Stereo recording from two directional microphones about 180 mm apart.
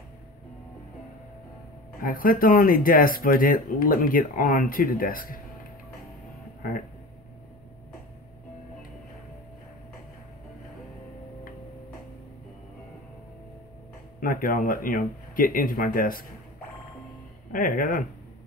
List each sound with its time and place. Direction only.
2.0 s speech: 50° left (ahead or behind)
14.2 s speech: 50° left (ahead or behind)
17.5 s speech: 50° left (ahead or behind)